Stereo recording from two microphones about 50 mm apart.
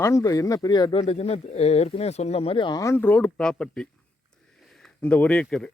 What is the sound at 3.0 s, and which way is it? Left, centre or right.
Speech, left.